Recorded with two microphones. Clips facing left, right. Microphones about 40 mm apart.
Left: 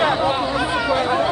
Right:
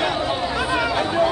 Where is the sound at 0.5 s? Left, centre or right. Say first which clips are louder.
Left 2 dB; centre.